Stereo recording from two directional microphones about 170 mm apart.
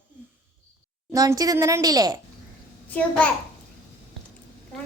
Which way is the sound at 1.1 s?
20° right (ahead or behind).